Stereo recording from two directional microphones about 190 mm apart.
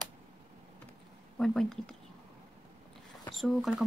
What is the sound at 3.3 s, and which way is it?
Speech, centre (ahead or behind).